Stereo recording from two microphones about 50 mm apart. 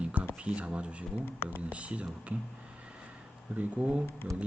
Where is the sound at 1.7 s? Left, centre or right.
Right.